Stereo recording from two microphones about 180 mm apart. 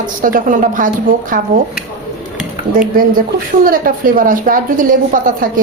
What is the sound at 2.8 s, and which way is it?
A woman's voice, 50° right (ahead or behind).